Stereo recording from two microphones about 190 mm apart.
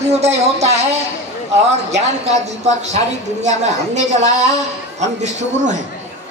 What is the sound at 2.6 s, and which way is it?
Speech, 35° right (ahead or behind).